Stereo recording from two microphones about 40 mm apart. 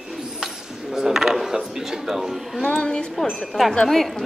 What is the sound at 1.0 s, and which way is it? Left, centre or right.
Speech, centre.